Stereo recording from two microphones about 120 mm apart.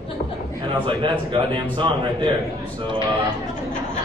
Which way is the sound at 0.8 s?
45° right (ahead or behind).